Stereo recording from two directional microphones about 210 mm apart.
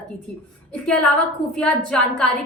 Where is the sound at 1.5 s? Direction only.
5° left (ahead or behind).